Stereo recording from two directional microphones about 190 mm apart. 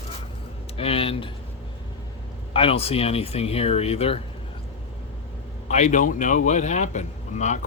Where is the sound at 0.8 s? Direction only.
30° left (ahead or behind).